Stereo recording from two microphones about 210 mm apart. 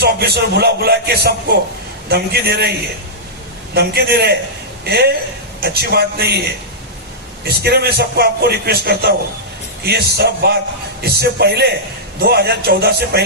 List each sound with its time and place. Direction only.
0.0 s a man's voice: 50° right (ahead or behind)
3.8 s a man's voice: 50° right (ahead or behind)
7.4 s a man's voice: 50° right (ahead or behind)